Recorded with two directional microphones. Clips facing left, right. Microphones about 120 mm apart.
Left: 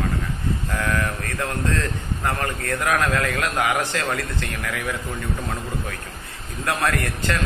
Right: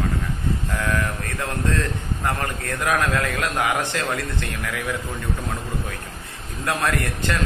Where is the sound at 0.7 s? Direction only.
15° right (ahead or behind).